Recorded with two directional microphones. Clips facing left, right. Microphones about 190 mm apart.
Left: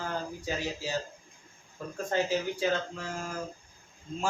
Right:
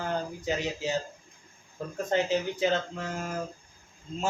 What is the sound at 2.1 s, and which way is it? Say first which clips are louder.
Speech: right 2 dB; 20° right (ahead or behind).